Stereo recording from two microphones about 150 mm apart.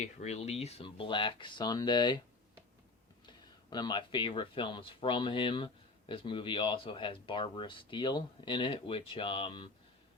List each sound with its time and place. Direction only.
0.0 s speech: 50° left (ahead or behind); by 2.2 s 30° left (ahead or behind)
3.2 s speech: 30° left (ahead or behind)